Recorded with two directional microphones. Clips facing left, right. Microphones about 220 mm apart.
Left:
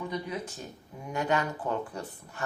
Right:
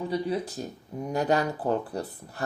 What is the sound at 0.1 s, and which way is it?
Speech, 35° right (ahead or behind).